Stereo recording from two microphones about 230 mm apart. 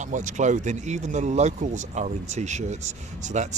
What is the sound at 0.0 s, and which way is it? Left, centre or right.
Speech, right.